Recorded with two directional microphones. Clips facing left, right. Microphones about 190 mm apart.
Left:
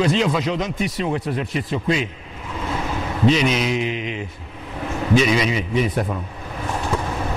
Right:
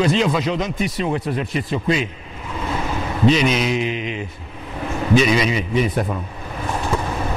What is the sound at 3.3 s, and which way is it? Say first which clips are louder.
Speech: right 1 dB; 10° right (ahead or behind).